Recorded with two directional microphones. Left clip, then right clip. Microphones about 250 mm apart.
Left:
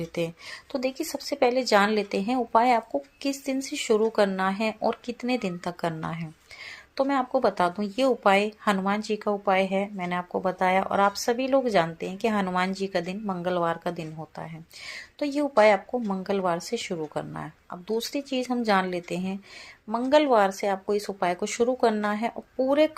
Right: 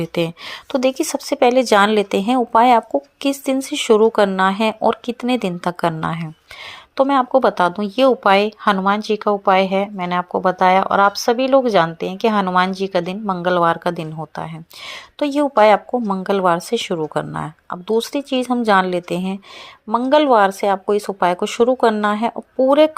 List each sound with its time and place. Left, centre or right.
0.0 s speech: right